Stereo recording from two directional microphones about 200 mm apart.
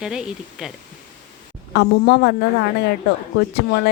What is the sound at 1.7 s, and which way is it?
Speech, 55° left (ahead or behind).